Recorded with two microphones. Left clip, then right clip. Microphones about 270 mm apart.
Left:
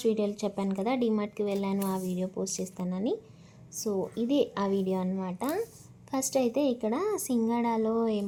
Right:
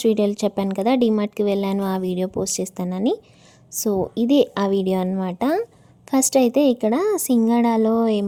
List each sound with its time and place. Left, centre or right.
0.0 s speech: right